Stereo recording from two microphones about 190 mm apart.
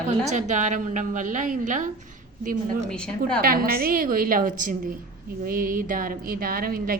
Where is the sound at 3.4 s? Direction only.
50° right (ahead or behind).